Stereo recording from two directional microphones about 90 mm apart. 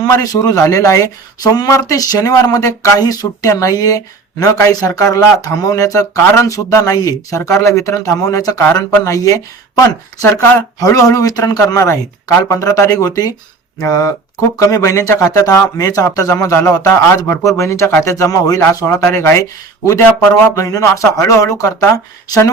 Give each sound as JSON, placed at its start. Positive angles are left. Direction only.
{"t": 0.0, "sound": "speech", "side_deg": 40}